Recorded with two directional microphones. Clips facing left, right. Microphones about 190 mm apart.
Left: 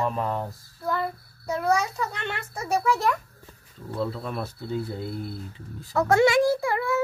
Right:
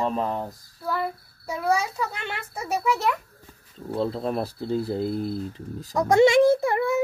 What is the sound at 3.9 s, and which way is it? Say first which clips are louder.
Speech: right 4 dB; 30° right (ahead or behind).